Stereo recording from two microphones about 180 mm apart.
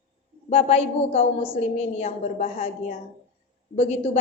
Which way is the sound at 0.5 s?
35° left (ahead or behind).